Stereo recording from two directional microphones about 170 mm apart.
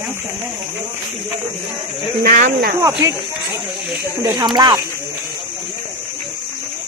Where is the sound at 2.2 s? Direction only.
55° right (ahead or behind).